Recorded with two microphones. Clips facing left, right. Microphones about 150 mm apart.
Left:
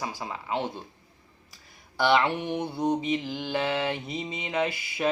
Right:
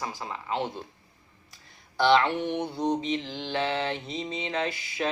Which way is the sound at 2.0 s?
10° left (ahead or behind).